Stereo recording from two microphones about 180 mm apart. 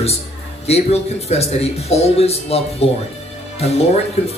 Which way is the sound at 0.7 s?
35° left (ahead or behind).